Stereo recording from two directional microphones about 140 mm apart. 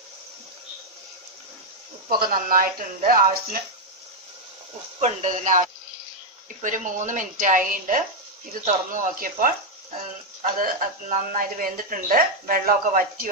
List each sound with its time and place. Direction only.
2.0 s speech: 90° right
5.0 s a woman's voice: 60° right (ahead or behind); by 13.3 s 85° right